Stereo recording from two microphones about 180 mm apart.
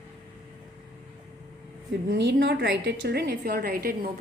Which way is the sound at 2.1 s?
65° right (ahead or behind).